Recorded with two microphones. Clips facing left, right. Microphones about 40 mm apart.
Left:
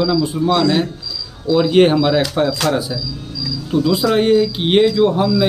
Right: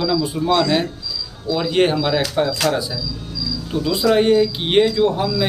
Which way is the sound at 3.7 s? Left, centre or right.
Centre.